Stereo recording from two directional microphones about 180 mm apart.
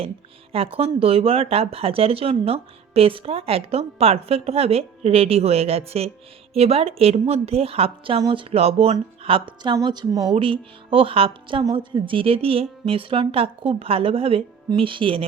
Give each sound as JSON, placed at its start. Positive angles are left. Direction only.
{"t": 0.5, "sound": "speech", "side_deg": -35}